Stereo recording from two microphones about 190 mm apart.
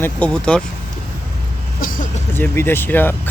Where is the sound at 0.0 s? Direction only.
5° left (ahead or behind).